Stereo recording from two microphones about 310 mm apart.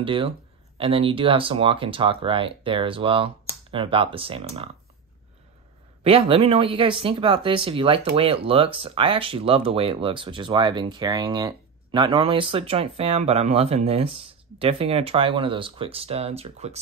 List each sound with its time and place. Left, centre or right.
0.0 s speech: centre
6.0 s speech: centre